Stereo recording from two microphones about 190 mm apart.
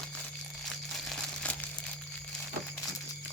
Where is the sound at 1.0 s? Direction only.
5° left (ahead or behind).